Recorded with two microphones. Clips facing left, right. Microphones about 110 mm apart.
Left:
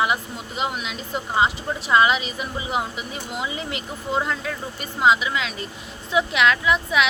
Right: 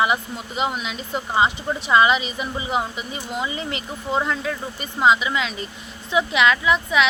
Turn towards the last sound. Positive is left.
turn(degrees=0)  # may be behind; listen again after turning